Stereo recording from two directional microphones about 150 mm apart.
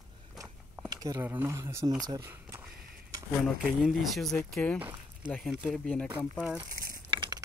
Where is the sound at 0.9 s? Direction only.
25° right (ahead or behind).